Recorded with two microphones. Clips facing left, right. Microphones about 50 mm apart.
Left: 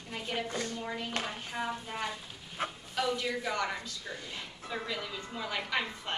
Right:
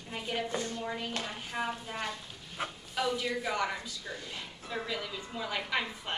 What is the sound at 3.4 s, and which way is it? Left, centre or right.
A woman's voice, centre.